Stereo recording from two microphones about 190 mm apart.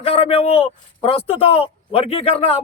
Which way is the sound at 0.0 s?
30° left (ahead or behind).